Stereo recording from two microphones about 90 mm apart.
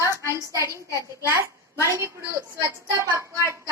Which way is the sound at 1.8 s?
30° right (ahead or behind).